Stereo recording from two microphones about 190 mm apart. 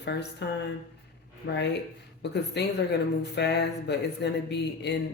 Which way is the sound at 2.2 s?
60° left (ahead or behind).